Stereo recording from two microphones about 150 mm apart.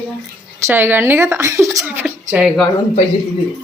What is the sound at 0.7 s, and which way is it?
Speech, 15° right (ahead or behind).